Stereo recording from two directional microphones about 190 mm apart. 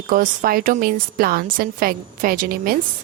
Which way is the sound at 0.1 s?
50° right (ahead or behind).